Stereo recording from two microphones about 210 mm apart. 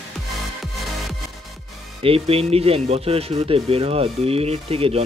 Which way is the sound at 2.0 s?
25° right (ahead or behind).